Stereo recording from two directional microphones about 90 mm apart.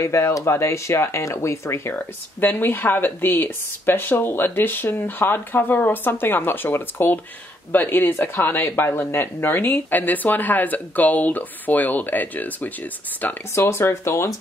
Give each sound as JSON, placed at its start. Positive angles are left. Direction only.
{"t": 0.0, "sound": "speech", "side_deg": 30}